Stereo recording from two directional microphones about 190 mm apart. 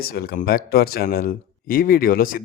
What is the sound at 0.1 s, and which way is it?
Speech, 50° left (ahead or behind).